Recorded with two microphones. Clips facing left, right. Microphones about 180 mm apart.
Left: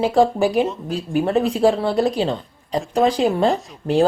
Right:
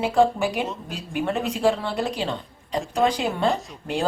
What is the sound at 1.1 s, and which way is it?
Speech, 35° left (ahead or behind).